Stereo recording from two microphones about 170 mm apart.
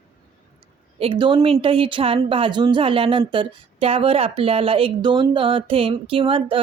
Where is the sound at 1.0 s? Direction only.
30° right (ahead or behind).